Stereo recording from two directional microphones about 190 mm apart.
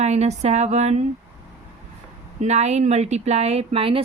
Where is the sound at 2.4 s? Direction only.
35° right (ahead or behind).